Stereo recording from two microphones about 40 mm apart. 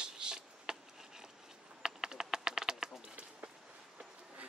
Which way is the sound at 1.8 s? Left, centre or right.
Centre.